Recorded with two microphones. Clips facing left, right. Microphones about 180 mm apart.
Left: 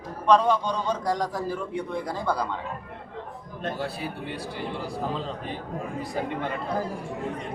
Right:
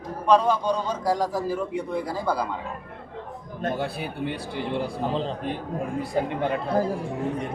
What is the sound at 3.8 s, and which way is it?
Speech, 60° right (ahead or behind).